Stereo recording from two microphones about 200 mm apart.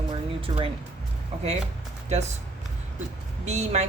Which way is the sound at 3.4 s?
35° right (ahead or behind).